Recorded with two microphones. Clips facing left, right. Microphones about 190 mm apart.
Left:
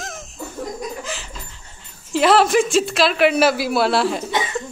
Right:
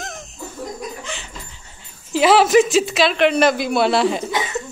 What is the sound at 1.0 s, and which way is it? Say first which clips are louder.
Dog: left 2 dB; centre (ahead or behind).